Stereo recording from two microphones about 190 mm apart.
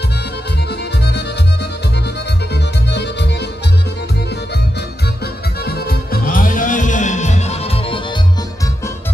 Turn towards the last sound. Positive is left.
turn(degrees=30)  # may be behind; listen again after turning